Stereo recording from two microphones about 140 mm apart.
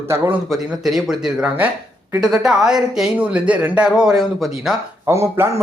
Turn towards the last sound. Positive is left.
turn(degrees=-20)  # may be behind; listen again after turning